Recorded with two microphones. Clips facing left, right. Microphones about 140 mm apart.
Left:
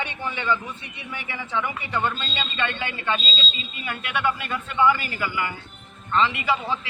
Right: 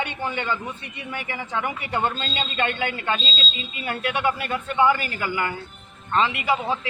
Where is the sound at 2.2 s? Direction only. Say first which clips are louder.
Right 2 dB; 50° right (ahead or behind).